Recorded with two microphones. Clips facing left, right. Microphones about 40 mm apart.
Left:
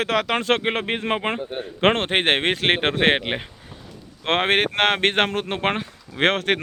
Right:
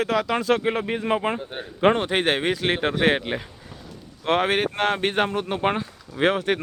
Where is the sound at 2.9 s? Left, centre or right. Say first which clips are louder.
Left 2 dB; left.